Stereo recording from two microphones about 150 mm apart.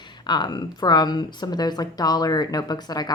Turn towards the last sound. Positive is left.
turn(degrees=25)  # may be behind; listen again after turning